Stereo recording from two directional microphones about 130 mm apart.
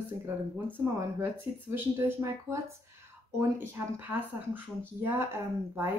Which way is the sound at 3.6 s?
15° right (ahead or behind).